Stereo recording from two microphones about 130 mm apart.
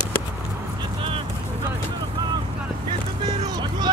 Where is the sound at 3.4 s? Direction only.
30° right (ahead or behind).